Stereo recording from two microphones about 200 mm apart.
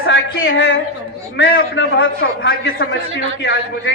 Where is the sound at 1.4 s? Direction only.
55° left (ahead or behind).